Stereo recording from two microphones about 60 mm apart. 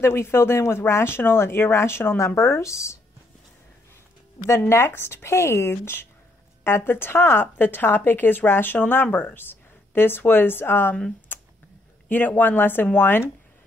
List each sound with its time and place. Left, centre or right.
0.0 s speech: left
4.6 s speech: left
11.3 s computer keyboard: left
12.1 s speech: left